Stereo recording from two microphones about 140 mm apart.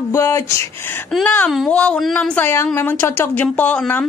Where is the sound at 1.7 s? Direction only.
10° left (ahead or behind).